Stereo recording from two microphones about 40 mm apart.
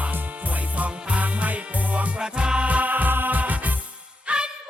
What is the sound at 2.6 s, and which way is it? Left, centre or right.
Music, right.